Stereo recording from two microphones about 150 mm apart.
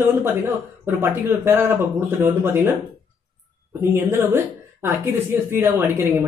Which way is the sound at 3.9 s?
15° right (ahead or behind).